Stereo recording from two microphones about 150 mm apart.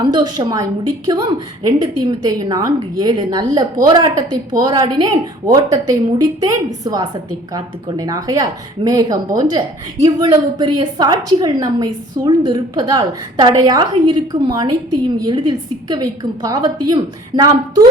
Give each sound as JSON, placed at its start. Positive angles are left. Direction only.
{"t": 0.0, "sound": "speech", "side_deg": -30}